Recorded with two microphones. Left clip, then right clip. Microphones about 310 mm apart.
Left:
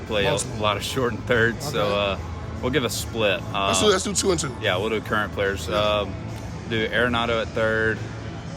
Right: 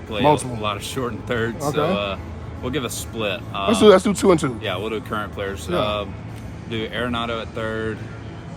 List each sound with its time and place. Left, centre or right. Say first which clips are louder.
0.1 s speech: right 5 dB; centre
3.8 s speech: right 11 dB; right
4.6 s speech: left 2 dB; centre